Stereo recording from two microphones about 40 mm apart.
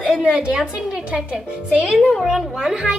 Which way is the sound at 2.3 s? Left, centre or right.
Centre.